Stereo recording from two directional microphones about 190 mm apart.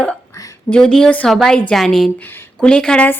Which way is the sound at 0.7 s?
5° left (ahead or behind).